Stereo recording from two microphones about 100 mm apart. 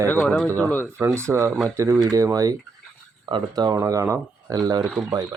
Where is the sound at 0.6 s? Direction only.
15° left (ahead or behind).